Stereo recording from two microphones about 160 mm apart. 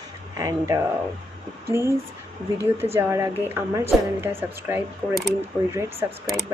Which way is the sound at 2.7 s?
15° right (ahead or behind).